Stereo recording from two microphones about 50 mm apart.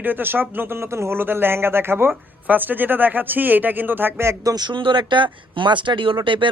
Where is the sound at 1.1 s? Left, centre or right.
Right.